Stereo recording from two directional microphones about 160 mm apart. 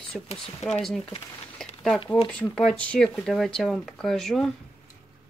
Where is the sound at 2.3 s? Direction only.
5° left (ahead or behind).